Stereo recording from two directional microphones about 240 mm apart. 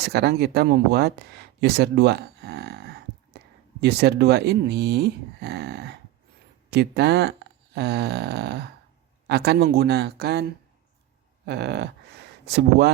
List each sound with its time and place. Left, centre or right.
0.0 s speech: right
11.4 s speech: right